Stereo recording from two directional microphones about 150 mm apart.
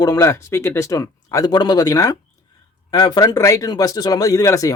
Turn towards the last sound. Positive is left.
turn(degrees=20)  # may be behind; listen again after turning